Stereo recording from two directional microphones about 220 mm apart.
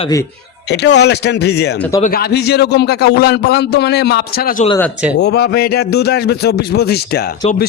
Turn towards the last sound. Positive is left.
turn(degrees=45)  # may be behind; listen again after turning